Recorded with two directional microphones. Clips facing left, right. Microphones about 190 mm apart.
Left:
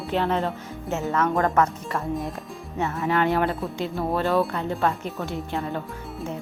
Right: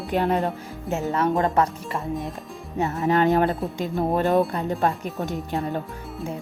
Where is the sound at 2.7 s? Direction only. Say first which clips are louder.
Right 3 dB; 40° right (ahead or behind).